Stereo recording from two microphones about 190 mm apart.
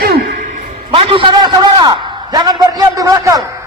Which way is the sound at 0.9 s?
30° right (ahead or behind).